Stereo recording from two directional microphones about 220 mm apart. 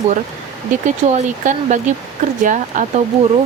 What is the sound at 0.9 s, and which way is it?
Speech, 35° right (ahead or behind).